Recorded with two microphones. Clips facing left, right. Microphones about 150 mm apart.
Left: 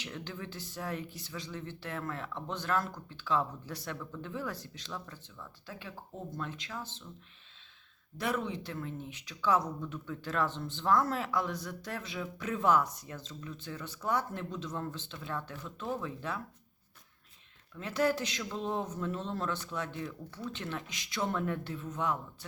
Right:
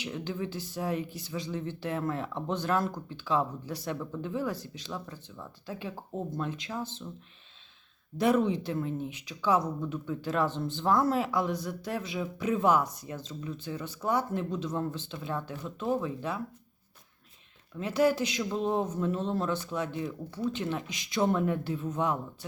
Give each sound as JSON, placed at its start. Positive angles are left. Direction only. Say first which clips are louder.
{"t": 0.0, "sound": "speech", "louder": "right 7 dB", "side_deg": -10}
{"t": 3.9, "sound": "speech", "louder": "right 6 dB", "side_deg": -25}
{"t": 4.2, "sound": "speech", "louder": "right 6 dB", "side_deg": -10}
{"t": 8.2, "sound": "speech", "louder": "right 9 dB", "side_deg": -20}
{"t": 17.7, "sound": "speech", "louder": "right 5 dB", "side_deg": -10}